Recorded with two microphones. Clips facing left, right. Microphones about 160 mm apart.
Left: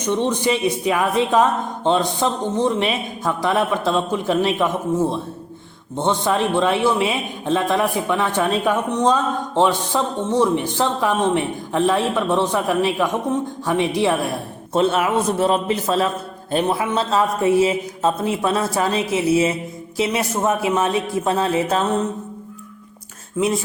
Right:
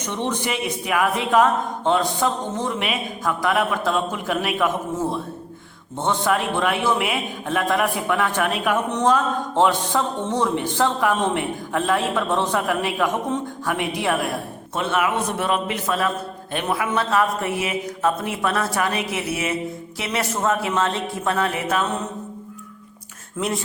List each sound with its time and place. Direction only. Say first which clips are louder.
0.0 s speech: left 6 dB; 15° left (ahead or behind)
6.0 s a man's voice: left 2 dB; 20° left (ahead or behind)